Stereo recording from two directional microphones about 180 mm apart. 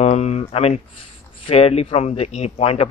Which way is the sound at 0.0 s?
40° left (ahead or behind).